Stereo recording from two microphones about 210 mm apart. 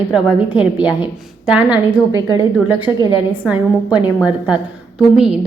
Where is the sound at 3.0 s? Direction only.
20° left (ahead or behind).